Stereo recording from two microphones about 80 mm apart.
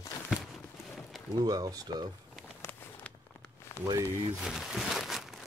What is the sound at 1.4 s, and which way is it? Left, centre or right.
Speech, right.